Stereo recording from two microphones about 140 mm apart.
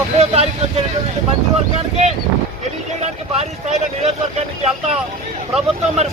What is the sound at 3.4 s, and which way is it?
Speech, 50° right (ahead or behind).